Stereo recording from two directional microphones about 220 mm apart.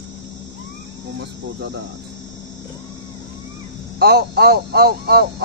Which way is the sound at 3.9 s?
45° right (ahead or behind).